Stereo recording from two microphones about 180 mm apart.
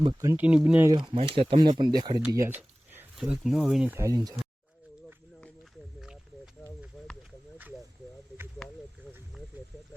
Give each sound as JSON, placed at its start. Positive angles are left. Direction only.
{"t": 0.0, "sound": "speech", "side_deg": -20}
{"t": 0.9, "sound": "speech", "side_deg": -25}
{"t": 6.0, "sound": "wild animals", "side_deg": -5}
{"t": 8.6, "sound": "a sound", "side_deg": 0}